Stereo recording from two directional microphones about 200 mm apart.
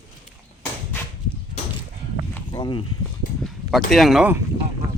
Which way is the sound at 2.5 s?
25° left (ahead or behind).